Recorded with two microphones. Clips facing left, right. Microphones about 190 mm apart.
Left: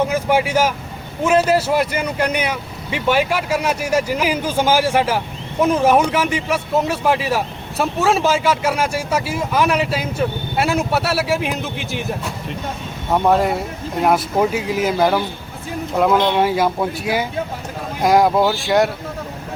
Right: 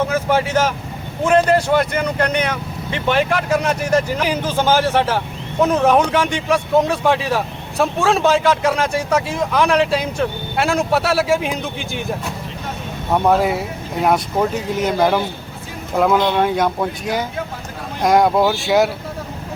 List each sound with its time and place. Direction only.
0.1 s speech: 10° left (ahead or behind)